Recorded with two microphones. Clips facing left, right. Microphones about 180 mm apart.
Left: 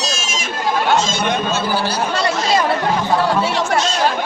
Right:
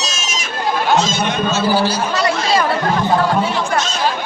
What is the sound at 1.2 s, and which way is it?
Speech, 55° left (ahead or behind).